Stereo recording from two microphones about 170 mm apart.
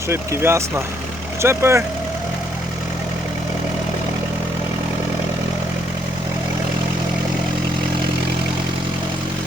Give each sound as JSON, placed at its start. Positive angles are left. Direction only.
{"t": 0.1, "sound": "speech", "side_deg": -15}